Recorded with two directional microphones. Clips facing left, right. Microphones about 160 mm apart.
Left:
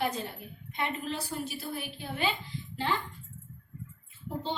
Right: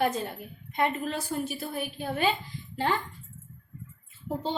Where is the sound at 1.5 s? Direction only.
50° right (ahead or behind).